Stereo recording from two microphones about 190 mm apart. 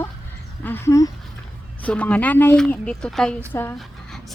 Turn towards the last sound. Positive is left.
turn(degrees=10)  # may be behind; listen again after turning